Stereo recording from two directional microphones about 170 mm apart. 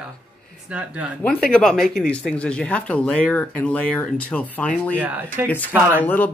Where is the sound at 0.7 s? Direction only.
5° right (ahead or behind).